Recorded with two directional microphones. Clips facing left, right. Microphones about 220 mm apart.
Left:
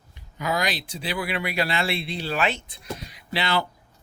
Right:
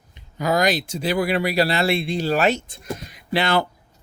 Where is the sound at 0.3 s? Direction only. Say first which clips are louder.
Right 7 dB; 40° right (ahead or behind).